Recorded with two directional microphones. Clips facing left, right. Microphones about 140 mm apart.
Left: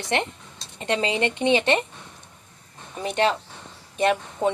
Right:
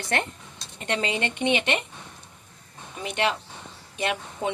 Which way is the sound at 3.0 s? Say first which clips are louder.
Left 4 dB; 40° left (ahead or behind).